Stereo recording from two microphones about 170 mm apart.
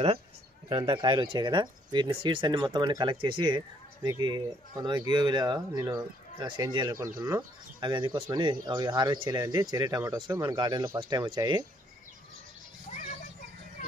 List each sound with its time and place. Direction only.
0.7 s speech: 30° right (ahead or behind)